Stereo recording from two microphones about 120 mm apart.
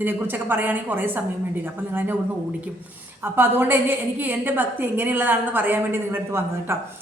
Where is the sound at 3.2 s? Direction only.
15° right (ahead or behind).